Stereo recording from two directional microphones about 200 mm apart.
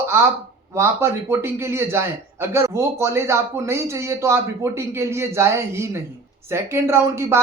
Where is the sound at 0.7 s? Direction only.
15° right (ahead or behind).